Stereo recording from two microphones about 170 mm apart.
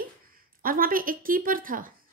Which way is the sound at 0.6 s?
55° right (ahead or behind).